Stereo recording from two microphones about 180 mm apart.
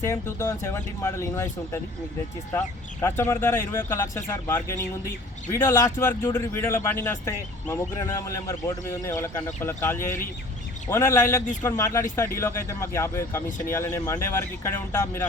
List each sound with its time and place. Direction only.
0.0 s speech: 15° left (ahead or behind)